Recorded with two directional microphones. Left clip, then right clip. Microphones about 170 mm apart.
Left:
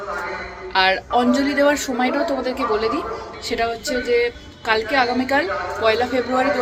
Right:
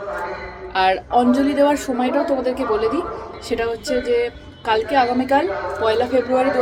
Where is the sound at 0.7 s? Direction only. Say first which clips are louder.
Even; 15° right (ahead or behind).